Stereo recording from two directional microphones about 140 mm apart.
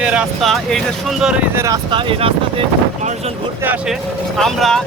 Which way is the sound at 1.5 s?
20° right (ahead or behind).